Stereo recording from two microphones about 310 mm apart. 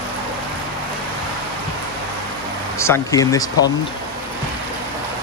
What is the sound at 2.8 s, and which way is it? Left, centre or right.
Speech, centre.